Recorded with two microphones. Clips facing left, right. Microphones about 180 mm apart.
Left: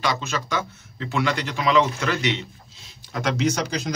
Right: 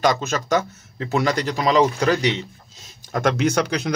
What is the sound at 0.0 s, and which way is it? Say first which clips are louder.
Speech: right 5 dB; 45° right (ahead or behind).